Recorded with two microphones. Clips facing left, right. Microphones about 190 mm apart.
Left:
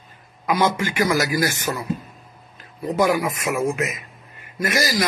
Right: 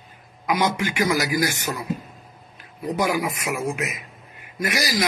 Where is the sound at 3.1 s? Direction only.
45° left (ahead or behind).